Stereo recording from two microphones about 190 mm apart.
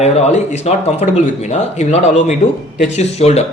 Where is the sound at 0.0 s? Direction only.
35° left (ahead or behind).